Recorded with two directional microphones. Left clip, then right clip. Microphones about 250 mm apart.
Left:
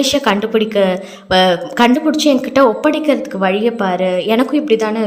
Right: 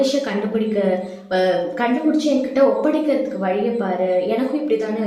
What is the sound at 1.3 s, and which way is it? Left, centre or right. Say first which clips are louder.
Speech: left 6 dB; left.